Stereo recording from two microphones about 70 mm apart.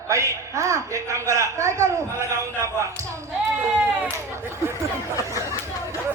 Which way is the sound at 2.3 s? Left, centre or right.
Right.